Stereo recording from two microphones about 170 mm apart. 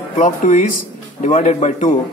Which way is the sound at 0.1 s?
45° left (ahead or behind).